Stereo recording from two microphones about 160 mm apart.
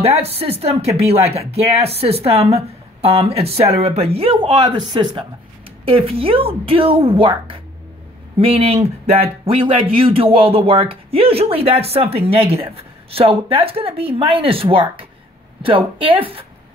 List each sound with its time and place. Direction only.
0.0 s speech: 40° right (ahead or behind)